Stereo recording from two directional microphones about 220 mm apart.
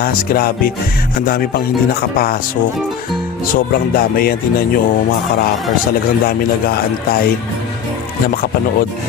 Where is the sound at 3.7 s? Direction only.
45° left (ahead or behind).